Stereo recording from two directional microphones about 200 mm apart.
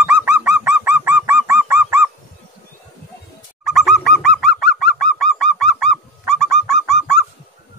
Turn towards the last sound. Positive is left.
turn(degrees=0)  # may be behind; listen again after turning